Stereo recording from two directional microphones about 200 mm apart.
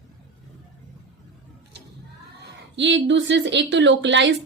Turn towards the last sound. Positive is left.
turn(degrees=-65)  # may be behind; listen again after turning